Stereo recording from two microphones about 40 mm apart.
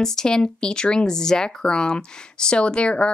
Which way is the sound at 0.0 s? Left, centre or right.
Centre.